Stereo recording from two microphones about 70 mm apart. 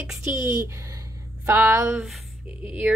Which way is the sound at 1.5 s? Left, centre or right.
Right.